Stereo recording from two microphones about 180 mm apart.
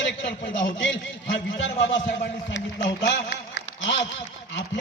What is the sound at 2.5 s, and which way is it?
A man's voice, 75° left (ahead or behind).